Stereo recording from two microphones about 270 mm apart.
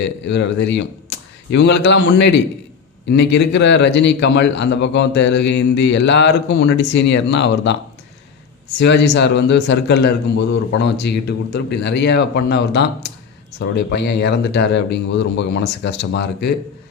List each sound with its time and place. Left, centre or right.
0.3 s a man's voice: left
8.8 s a man's voice: left